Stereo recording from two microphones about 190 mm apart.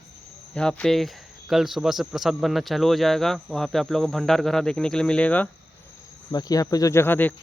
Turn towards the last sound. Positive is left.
turn(degrees=10)  # may be behind; listen again after turning